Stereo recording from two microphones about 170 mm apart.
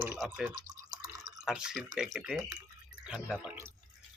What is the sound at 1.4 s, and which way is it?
Speech, 5° right (ahead or behind).